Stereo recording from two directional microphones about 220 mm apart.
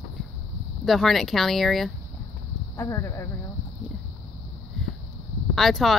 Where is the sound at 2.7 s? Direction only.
10° left (ahead or behind).